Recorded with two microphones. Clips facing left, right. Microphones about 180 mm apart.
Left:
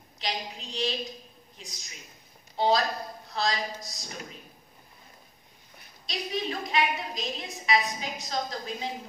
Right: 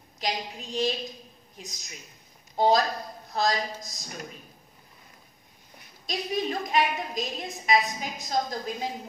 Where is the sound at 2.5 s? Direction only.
45° right (ahead or behind).